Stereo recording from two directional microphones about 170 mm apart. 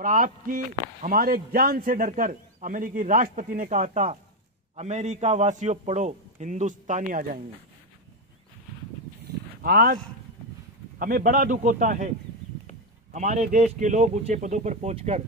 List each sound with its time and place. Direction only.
0.0 s a man's voice: 55° right (ahead or behind)
9.6 s speech: 60° right (ahead or behind)
11.0 s a man's voice: 55° right (ahead or behind)
13.1 s a man's voice: 45° right (ahead or behind)